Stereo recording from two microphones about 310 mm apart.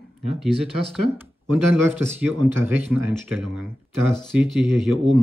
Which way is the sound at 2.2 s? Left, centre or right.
Centre.